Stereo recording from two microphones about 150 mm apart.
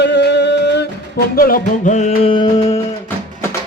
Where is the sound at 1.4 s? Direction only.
75° left (ahead or behind); by 2.3 s 50° left (ahead or behind).